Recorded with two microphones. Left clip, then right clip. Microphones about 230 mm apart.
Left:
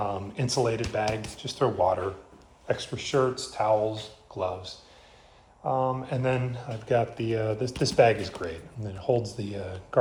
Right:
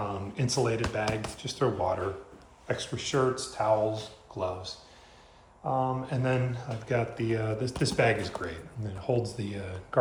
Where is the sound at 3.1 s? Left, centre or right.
Left.